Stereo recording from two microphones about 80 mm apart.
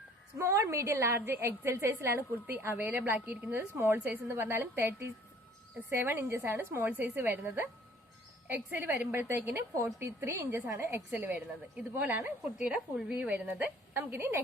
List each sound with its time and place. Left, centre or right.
0.3 s a woman's voice: right
12.5 s a woman's voice: centre; by 14.4 s right